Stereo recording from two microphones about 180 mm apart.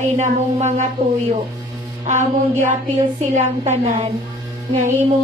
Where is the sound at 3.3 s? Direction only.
40° right (ahead or behind).